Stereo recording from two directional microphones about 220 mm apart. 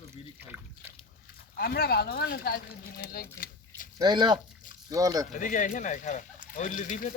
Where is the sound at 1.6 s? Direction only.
45° left (ahead or behind).